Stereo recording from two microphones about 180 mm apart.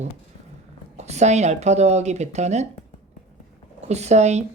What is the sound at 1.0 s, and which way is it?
Speech, 40° right (ahead or behind).